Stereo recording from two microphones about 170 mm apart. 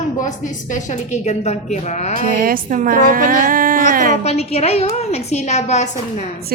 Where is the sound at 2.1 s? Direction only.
55° right (ahead or behind).